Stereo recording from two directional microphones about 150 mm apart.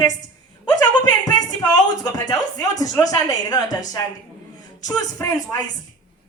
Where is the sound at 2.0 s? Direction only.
25° left (ahead or behind).